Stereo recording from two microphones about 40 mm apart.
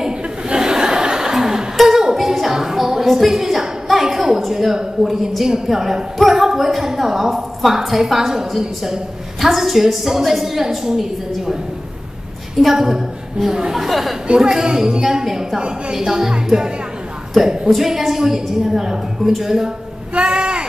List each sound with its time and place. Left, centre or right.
0.6 s chuckle: centre
1.8 s a sound: centre
4.5 s a woman's voice: centre
12.5 s a woman's voice: centre
13.7 s speech: centre
14.2 s a woman's voice: right
20.2 s a sound: right